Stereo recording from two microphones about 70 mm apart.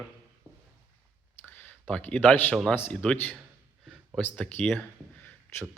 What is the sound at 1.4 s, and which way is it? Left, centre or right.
Clicking, left.